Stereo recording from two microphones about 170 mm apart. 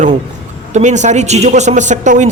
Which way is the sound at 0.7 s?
45° right (ahead or behind).